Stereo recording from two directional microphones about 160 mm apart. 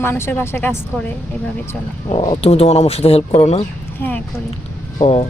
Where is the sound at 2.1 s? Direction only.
35° left (ahead or behind).